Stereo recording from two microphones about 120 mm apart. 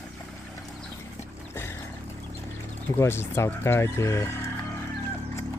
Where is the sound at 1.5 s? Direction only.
20° left (ahead or behind).